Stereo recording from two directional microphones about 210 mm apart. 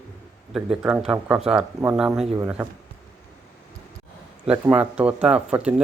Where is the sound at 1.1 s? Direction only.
5° right (ahead or behind).